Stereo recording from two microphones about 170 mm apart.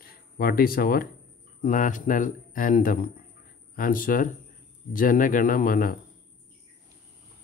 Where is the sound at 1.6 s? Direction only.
50° left (ahead or behind).